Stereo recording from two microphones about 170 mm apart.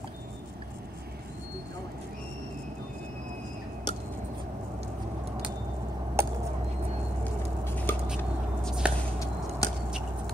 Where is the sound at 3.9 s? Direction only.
25° left (ahead or behind).